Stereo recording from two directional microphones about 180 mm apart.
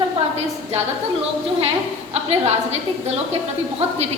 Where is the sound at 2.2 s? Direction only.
35° right (ahead or behind).